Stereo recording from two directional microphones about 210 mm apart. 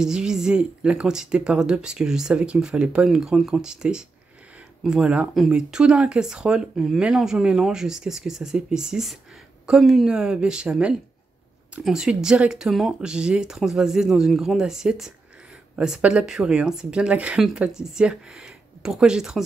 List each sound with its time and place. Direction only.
0.0 s speech: 5° right (ahead or behind)